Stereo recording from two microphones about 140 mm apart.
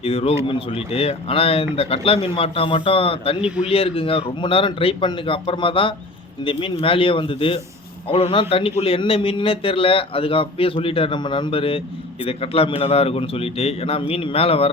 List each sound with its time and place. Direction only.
0.0 s speech: 45° left (ahead or behind)
3.4 s a man's voice: 5° right (ahead or behind)
3.7 s a man's voice: 40° left (ahead or behind)